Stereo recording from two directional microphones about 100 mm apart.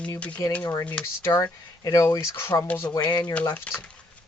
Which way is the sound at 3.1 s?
45° left (ahead or behind).